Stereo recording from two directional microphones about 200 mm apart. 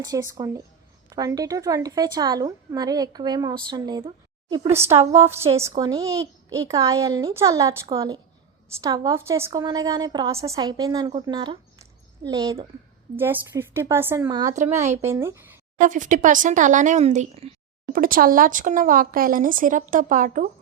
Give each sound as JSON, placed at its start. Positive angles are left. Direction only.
{"t": 0.0, "sound": "a child's voice", "side_deg": -15}
{"t": 4.7, "sound": "a child's voice", "side_deg": -10}
{"t": 14.5, "sound": "speech", "side_deg": -35}
{"t": 15.0, "sound": "a child's voice", "side_deg": -15}
{"t": 15.8, "sound": "speech", "side_deg": -40}
{"t": 17.9, "sound": "speech", "side_deg": -45}